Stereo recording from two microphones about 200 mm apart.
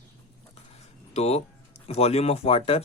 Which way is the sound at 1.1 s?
30° left (ahead or behind).